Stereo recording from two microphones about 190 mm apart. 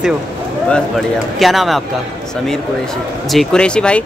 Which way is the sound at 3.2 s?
Centre (ahead or behind).